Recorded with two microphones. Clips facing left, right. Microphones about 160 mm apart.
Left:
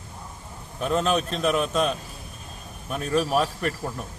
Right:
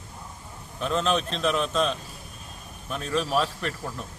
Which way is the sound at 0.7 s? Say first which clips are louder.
Left 2 dB; 10° left (ahead or behind).